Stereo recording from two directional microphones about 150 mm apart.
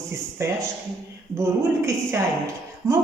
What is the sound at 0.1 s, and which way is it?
A man's voice, 20° right (ahead or behind).